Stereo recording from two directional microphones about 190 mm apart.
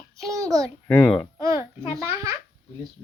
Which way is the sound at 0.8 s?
5° left (ahead or behind).